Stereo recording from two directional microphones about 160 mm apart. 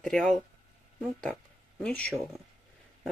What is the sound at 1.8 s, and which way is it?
Speech, 5° left (ahead or behind).